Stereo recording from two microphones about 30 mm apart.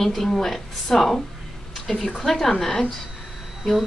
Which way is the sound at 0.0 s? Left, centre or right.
Centre.